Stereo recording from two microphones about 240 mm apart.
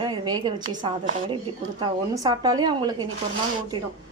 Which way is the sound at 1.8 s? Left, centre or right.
Centre.